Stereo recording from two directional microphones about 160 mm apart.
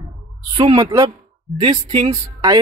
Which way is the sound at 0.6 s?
30° right (ahead or behind).